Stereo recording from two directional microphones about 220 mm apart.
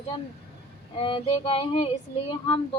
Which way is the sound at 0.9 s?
25° left (ahead or behind).